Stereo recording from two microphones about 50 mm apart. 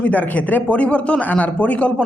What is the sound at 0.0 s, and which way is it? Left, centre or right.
Speech, left.